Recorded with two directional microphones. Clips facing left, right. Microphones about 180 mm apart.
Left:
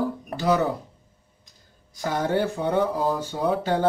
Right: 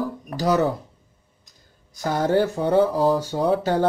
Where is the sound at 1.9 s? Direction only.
40° right (ahead or behind).